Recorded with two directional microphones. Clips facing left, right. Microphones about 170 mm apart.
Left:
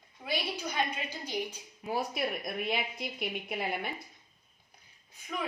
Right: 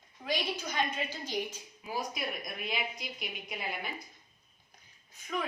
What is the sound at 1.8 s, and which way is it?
Speech, 60° left (ahead or behind).